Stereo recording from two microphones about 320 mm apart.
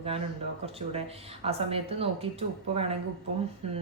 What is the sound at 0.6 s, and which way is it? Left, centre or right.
Speech, centre.